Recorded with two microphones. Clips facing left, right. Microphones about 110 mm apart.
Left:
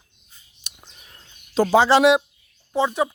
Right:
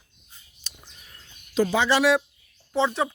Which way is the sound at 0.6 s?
25° left (ahead or behind).